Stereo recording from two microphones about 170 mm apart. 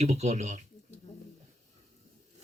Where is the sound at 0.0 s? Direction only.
40° right (ahead or behind).